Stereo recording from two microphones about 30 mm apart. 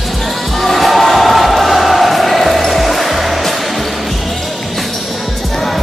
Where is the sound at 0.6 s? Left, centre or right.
Centre.